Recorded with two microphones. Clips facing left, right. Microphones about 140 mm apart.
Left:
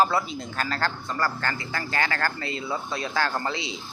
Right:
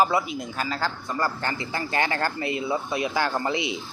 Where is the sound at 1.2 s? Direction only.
20° right (ahead or behind).